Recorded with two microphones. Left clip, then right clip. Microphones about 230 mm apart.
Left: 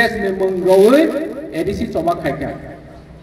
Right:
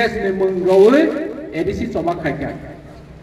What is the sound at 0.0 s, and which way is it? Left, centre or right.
A man's voice, left.